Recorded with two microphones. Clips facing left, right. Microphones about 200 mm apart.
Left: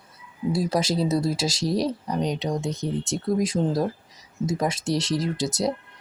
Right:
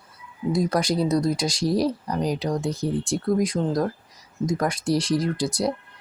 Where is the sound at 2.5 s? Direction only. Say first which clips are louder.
Right 2 dB; 20° left (ahead or behind).